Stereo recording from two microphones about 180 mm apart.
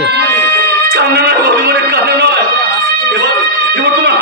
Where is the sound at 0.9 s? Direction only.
65° right (ahead or behind).